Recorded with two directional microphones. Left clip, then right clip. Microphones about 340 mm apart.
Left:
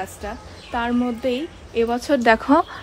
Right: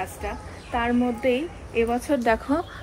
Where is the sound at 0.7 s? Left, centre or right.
Centre; by 2.6 s left.